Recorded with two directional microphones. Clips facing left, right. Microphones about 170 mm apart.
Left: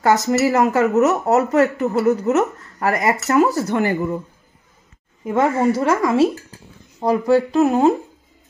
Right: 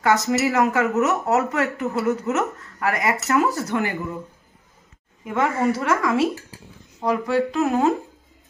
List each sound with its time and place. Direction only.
0.0 s speech: 35° left (ahead or behind)
5.2 s speech: 30° left (ahead or behind)